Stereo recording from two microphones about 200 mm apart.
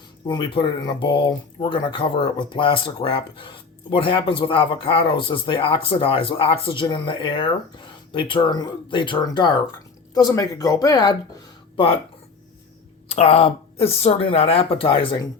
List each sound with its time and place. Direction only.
0.3 s speech: 25° left (ahead or behind)
13.1 s speech: 30° left (ahead or behind)